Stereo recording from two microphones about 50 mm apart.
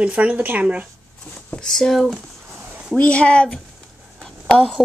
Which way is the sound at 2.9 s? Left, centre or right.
Left.